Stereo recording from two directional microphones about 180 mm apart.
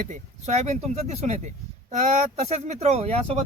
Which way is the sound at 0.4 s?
40° right (ahead or behind).